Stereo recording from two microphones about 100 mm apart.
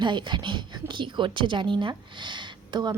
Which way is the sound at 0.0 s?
50° right (ahead or behind).